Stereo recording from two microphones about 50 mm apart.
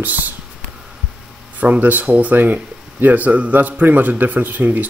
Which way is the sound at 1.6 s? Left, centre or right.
Right.